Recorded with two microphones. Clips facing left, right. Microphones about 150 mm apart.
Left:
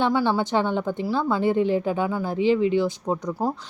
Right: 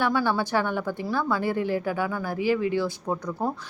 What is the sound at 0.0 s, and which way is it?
A woman's voice, 20° left (ahead or behind).